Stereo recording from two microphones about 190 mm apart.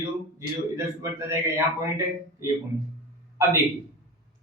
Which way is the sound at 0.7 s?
15° right (ahead or behind).